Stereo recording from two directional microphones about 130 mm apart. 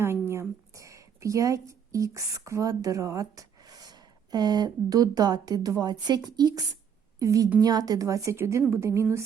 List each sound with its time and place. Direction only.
0.0 s a woman's voice: 20° right (ahead or behind)